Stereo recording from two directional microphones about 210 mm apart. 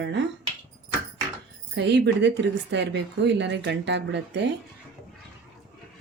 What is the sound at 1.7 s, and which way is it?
A woman's voice, 55° right (ahead or behind).